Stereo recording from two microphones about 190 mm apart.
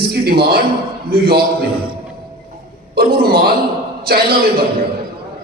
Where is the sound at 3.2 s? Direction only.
55° right (ahead or behind).